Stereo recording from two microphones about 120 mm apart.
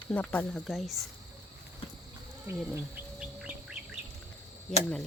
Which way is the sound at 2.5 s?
25° right (ahead or behind).